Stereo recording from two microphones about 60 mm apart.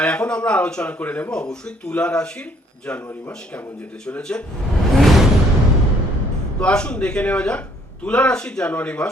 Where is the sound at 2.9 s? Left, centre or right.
Left.